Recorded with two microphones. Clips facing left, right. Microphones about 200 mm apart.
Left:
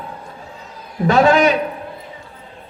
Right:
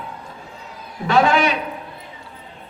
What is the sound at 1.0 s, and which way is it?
Speech, 40° left (ahead or behind).